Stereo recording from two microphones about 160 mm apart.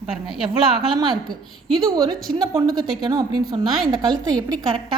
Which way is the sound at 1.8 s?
20° right (ahead or behind).